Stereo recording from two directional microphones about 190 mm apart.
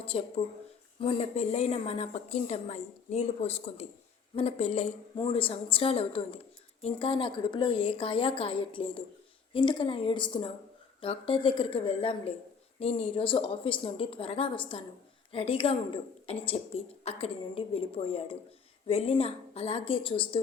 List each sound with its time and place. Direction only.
0.0 s a woman's voice: 30° left (ahead or behind)